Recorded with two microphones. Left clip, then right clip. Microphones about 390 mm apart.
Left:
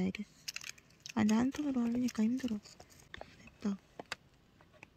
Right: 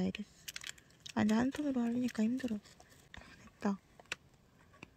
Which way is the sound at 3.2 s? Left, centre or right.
Centre.